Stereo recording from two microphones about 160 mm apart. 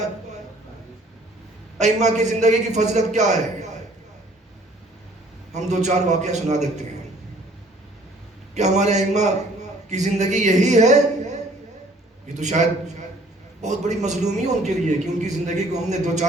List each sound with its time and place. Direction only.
1.8 s a man's voice: 45° right (ahead or behind)
5.5 s a man's voice: 45° right (ahead or behind)
8.5 s a man's voice: 45° right (ahead or behind)